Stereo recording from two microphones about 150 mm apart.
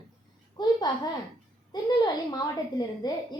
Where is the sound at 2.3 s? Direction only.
25° left (ahead or behind).